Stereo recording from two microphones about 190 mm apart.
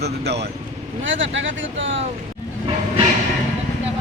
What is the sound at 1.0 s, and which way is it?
Speech, 80° right.